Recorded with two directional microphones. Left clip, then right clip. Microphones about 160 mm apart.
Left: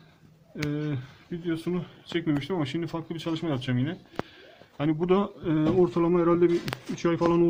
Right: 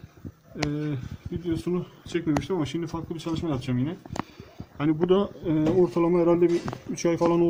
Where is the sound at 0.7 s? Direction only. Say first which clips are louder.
Right 1 dB; 5° left (ahead or behind).